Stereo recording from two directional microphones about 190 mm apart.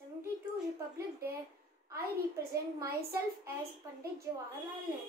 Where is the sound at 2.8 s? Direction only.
15° right (ahead or behind).